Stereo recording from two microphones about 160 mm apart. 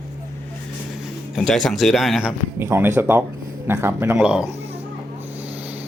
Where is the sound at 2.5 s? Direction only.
15° right (ahead or behind).